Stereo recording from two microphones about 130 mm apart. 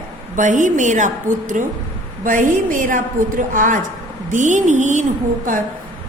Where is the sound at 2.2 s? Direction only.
90° right.